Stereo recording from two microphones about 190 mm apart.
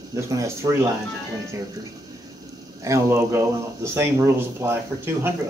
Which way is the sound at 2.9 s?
15° right (ahead or behind).